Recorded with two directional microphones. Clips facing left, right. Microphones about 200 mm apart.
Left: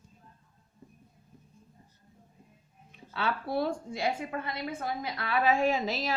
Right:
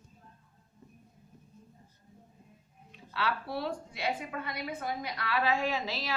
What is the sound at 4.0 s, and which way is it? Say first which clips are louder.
A woman's voice: left 2 dB; 25° left (ahead or behind).